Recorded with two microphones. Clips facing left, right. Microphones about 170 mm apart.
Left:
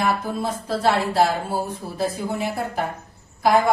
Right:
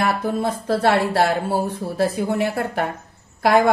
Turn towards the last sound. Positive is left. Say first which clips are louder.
# right 2 dB
turn(degrees=-65)  # may be behind; listen again after turning